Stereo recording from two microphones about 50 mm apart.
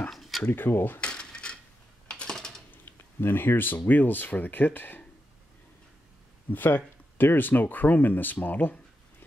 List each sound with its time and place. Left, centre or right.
0.1 s a sound: centre
0.5 s speech: left
1.0 s cutlery: centre
2.0 s typing: centre
2.7 s speech: left
6.5 s speech: left